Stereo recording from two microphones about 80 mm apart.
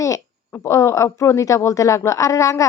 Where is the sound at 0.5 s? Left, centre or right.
Left.